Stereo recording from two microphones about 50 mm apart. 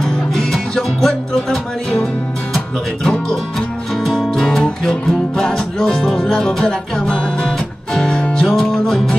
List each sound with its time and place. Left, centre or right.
0.0 s music: centre
8.5 s music: centre